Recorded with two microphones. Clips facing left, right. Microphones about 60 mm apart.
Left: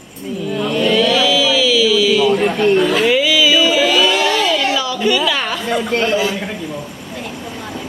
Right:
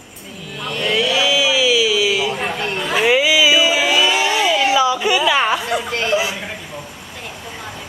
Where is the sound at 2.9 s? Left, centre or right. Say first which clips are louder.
Left 1 dB; centre.